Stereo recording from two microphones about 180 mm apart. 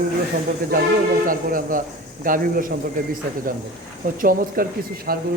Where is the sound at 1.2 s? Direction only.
50° right (ahead or behind).